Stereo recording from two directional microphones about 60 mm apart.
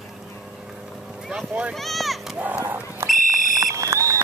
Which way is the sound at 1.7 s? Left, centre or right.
Centre.